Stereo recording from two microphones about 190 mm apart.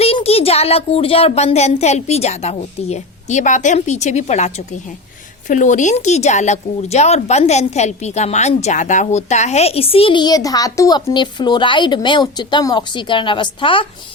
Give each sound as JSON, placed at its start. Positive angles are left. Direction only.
{"t": 0.0, "sound": "speech", "side_deg": 30}